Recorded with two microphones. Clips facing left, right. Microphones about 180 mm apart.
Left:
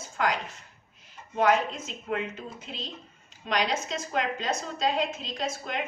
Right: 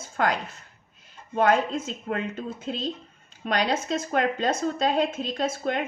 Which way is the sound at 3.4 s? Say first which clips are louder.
Right 3 dB; 50° right (ahead or behind).